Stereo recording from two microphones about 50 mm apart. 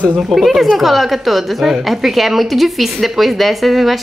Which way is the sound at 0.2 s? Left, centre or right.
Centre.